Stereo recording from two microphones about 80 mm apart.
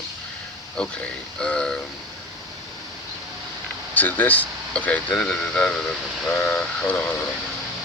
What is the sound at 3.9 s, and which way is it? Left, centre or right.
Speech, left.